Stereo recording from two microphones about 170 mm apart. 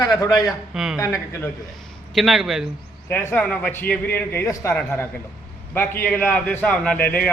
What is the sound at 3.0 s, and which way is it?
A man's voice, 10° left (ahead or behind).